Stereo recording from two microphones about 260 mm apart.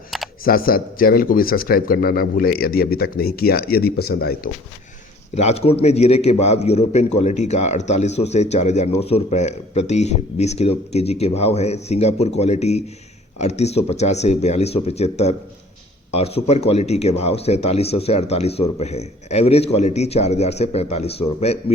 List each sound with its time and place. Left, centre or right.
0.1 s camera: centre
0.4 s a man's voice: left
5.3 s a man's voice: left